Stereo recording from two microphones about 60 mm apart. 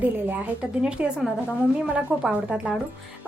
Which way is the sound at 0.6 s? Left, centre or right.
Centre.